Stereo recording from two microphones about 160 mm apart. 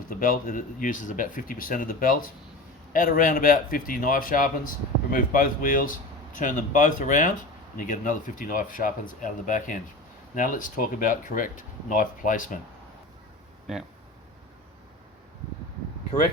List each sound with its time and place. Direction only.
0.0 s speech: 60° left (ahead or behind)
13.7 s speech: centre (ahead or behind)